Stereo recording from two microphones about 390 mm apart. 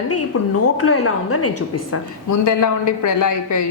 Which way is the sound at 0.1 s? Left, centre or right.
Left.